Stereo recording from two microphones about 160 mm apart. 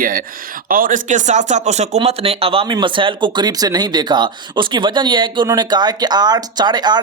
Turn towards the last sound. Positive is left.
turn(degrees=-25)  # may be behind; listen again after turning